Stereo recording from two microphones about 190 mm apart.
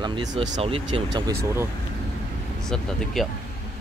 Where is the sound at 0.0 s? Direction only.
25° right (ahead or behind).